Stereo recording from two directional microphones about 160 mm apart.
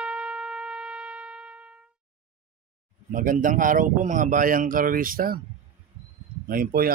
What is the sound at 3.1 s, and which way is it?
Speech, 55° right (ahead or behind).